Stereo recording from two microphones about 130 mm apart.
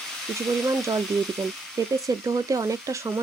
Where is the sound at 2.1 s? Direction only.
25° right (ahead or behind).